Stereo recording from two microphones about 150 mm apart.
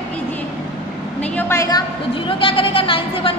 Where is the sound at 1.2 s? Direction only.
15° left (ahead or behind).